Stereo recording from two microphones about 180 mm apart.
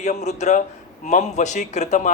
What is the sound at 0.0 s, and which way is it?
Speech, 40° left (ahead or behind).